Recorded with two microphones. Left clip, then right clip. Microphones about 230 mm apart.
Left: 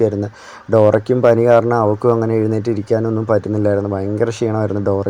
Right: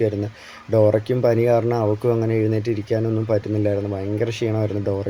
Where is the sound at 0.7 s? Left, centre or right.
Left.